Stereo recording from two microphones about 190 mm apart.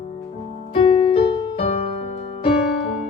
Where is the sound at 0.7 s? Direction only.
30° left (ahead or behind).